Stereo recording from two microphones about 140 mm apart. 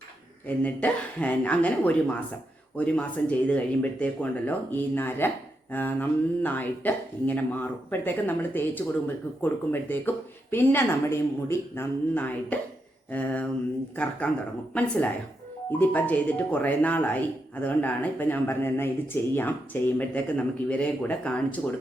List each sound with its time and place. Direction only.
0.4 s speech: 10° left (ahead or behind)